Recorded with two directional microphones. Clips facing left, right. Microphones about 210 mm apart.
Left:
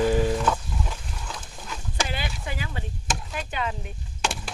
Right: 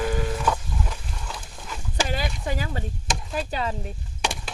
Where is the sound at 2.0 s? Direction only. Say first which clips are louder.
Right 4 dB; 40° right (ahead or behind).